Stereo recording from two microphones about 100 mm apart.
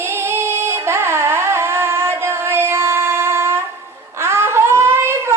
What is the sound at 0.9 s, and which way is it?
Music, 25° right (ahead or behind).